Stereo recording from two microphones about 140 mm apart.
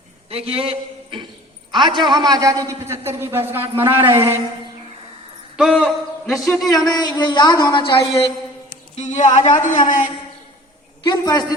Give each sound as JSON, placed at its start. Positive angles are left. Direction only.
{"t": 0.3, "sound": "a man's voice", "side_deg": -45}
{"t": 5.5, "sound": "a man's voice", "side_deg": -5}
{"t": 6.7, "sound": "a woman's voice", "side_deg": 30}
{"t": 9.0, "sound": "a sound", "side_deg": 60}
{"t": 9.4, "sound": "a man's voice", "side_deg": 60}
{"t": 11.0, "sound": "a woman's voice", "side_deg": 30}